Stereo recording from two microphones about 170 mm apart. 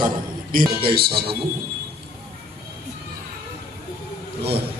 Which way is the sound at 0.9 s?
65° right (ahead or behind).